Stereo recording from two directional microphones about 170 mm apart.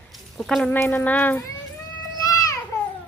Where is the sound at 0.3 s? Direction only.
Centre (ahead or behind).